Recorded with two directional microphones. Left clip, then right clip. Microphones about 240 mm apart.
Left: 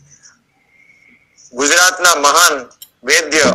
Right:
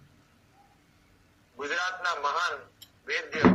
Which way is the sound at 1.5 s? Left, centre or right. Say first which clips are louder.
Left 19 dB; left.